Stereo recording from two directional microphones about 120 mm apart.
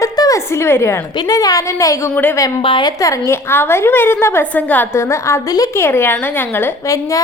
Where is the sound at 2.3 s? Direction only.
25° left (ahead or behind).